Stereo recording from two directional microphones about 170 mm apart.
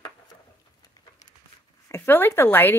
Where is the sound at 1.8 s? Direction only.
15° left (ahead or behind).